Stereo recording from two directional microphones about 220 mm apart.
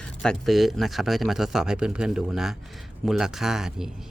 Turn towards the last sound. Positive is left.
turn(degrees=0)  # may be behind; listen again after turning